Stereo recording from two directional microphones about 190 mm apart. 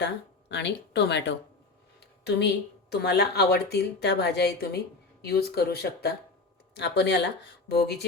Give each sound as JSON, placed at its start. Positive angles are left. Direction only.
{"t": 0.0, "sound": "speech", "side_deg": 65}
{"t": 2.0, "sound": "a sound", "side_deg": 60}
{"t": 2.9, "sound": "a woman's voice", "side_deg": 60}